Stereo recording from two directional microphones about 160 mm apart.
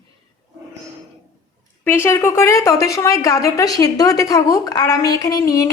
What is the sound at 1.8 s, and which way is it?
A woman's voice, 15° left (ahead or behind).